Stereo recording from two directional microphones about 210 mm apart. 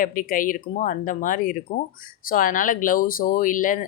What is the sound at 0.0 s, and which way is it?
Speech, 40° left (ahead or behind).